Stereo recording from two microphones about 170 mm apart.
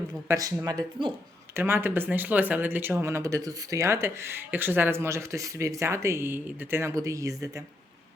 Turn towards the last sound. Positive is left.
turn(degrees=-20)  # may be behind; listen again after turning